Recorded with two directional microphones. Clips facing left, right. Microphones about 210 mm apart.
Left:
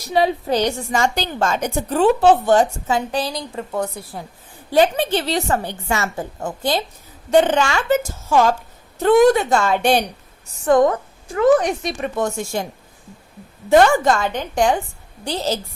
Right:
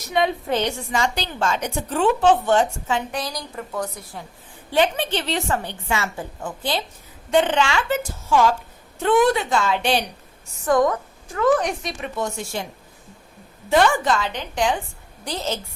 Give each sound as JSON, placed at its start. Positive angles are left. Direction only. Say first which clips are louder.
{"t": 0.0, "sound": "a woman's voice", "louder": "left 3 dB", "side_deg": 35}
{"t": 10.7, "sound": "a woman's voice", "louder": "left 4 dB", "side_deg": 25}
{"t": 11.8, "sound": "a woman's voice", "louder": "left 5 dB", "side_deg": 45}
{"t": 13.7, "sound": "a woman's voice", "louder": "left 5 dB", "side_deg": 45}
{"t": 15.2, "sound": "a woman's voice", "louder": "left 4 dB", "side_deg": 30}